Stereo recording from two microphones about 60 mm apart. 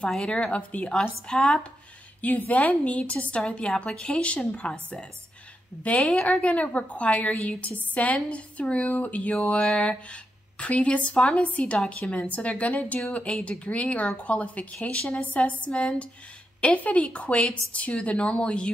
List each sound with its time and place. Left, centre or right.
0.2 s speech: centre
2.2 s speech: left
6.0 s speech: left